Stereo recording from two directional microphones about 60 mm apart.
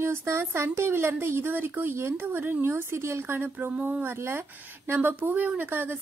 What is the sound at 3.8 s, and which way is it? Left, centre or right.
Speech, right.